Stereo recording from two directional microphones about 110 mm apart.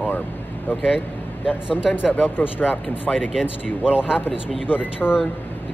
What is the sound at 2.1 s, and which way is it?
Speech, 15° left (ahead or behind).